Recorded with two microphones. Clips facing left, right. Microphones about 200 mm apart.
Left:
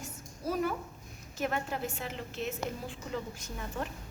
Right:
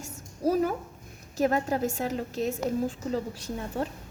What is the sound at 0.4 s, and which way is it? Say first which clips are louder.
A woman's voice: right 7 dB; 40° right (ahead or behind).